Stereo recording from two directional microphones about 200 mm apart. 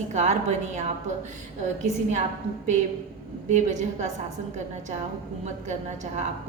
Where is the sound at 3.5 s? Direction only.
40° right (ahead or behind).